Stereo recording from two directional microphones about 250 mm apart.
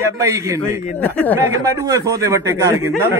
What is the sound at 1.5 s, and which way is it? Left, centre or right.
Speech, centre.